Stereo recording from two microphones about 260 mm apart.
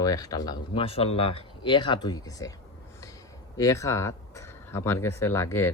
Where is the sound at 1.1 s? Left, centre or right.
Left.